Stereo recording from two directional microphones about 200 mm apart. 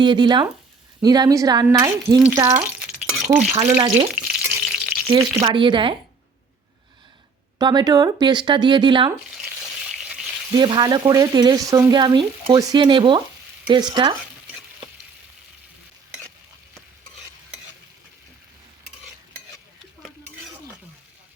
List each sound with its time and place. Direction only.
0.0 s speech: 20° right (ahead or behind)
3.8 s frying: 30° right (ahead or behind)
4.1 s stir: 5° right (ahead or behind)
5.0 s speech: 20° right (ahead or behind)
7.6 s speech: 20° right (ahead or behind)
9.9 s frying: 5° right (ahead or behind)
10.5 s speech: 20° right (ahead or behind)